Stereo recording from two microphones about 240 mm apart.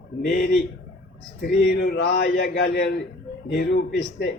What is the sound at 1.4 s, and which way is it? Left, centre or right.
A man's voice, left.